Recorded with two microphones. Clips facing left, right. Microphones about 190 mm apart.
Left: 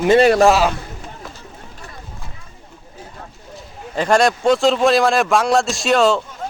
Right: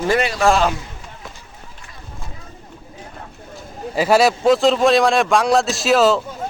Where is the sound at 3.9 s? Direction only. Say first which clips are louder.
Right 1 dB; 5° right (ahead or behind).